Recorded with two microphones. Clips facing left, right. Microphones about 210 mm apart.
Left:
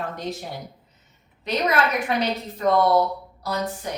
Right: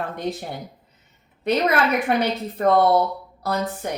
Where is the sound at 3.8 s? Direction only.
55° right (ahead or behind).